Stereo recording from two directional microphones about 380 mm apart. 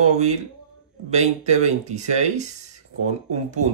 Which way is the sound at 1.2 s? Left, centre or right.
Centre.